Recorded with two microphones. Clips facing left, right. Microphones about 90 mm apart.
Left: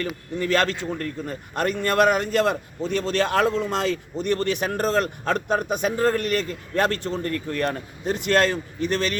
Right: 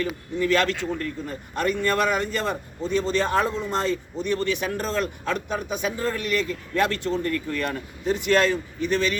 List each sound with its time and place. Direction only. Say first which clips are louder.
0.3 s a man's voice: even; 50° left (ahead or behind)
1.5 s a man's voice: left 2 dB; 55° left (ahead or behind); by 4.0 s 90° left
4.2 s a man's voice: left 2 dB; 55° left (ahead or behind)